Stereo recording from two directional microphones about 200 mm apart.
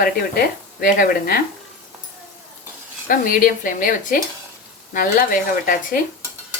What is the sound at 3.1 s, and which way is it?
Speech, 45° left (ahead or behind).